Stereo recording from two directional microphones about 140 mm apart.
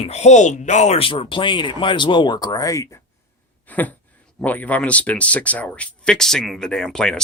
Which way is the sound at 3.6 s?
10° left (ahead or behind).